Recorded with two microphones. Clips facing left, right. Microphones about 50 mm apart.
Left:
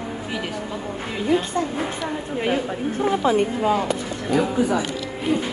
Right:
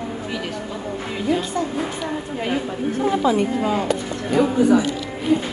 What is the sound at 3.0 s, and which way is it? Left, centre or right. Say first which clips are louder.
Speech: right 1 dB; left.